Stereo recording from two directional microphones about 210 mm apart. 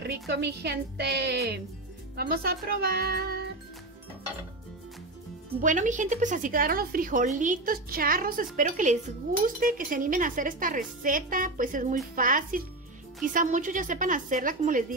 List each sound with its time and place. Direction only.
0.0 s a woman's voice: 50° right (ahead or behind)
5.6 s a woman's voice: 35° right (ahead or behind)